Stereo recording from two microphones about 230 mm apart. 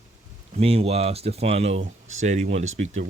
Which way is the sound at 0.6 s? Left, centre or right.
Right.